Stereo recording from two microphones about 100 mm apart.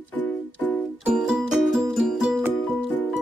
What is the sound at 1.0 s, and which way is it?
Music, 5° right (ahead or behind).